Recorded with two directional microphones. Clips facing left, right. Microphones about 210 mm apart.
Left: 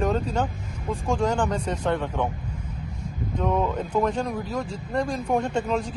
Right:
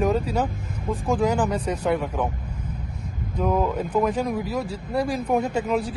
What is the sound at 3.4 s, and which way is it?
Speech, 5° right (ahead or behind).